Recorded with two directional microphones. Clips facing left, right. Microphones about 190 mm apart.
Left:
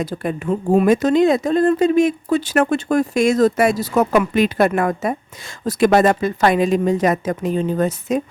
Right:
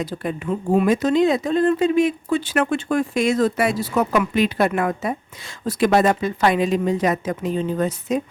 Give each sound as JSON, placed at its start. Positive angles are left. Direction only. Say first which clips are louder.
{"t": 0.0, "sound": "speech", "louder": "left 3 dB", "side_deg": 50}